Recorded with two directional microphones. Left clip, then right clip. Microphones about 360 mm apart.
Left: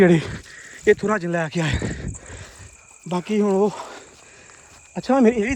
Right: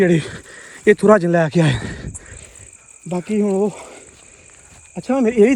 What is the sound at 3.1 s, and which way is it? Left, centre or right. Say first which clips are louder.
Speech: right 1 dB; centre.